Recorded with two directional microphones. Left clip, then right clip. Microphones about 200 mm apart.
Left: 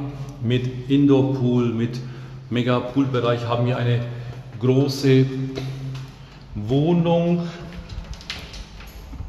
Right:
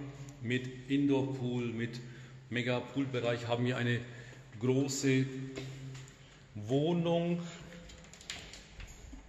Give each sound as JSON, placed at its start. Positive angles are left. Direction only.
{"t": 0.5, "sound": "a man's voice", "side_deg": 0}
{"t": 3.6, "sound": "a man's voice", "side_deg": -50}
{"t": 4.6, "sound": "a man's voice", "side_deg": -25}
{"t": 6.7, "sound": "a man's voice", "side_deg": -25}